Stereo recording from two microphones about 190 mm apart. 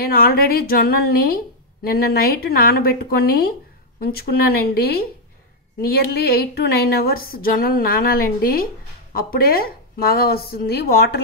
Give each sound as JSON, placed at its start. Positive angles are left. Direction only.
{"t": 0.0, "sound": "a woman's voice", "side_deg": 50}